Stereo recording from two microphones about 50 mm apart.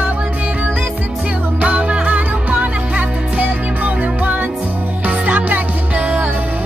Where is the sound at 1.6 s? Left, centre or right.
Right.